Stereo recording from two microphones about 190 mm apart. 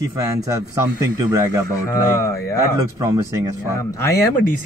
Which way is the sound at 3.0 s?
15° right (ahead or behind).